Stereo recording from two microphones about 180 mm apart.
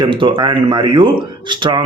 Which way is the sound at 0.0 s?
25° right (ahead or behind).